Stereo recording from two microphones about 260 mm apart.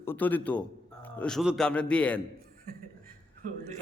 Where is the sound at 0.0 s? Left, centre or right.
Centre.